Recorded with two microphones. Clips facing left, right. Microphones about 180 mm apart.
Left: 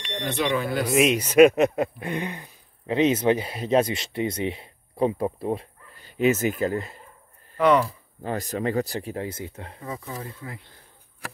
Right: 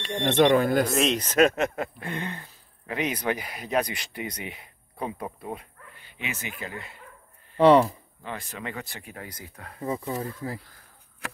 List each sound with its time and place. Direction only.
0.1 s speech: 45° right (ahead or behind)
0.9 s speech: 10° left (ahead or behind); by 7.0 s 40° left (ahead or behind)
7.5 s speech: 30° right (ahead or behind)
8.2 s speech: 40° left (ahead or behind)
9.8 s speech: 30° right (ahead or behind)